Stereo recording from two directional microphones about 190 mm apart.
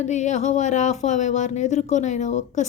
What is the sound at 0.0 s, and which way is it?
A woman's voice, 40° left (ahead or behind).